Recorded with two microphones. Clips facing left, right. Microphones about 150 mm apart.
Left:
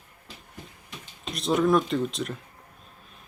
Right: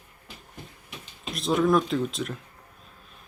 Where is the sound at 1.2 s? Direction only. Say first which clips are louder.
Even; centre (ahead or behind).